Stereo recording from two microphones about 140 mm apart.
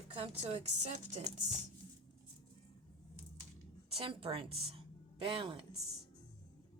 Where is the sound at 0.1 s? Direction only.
45° right (ahead or behind).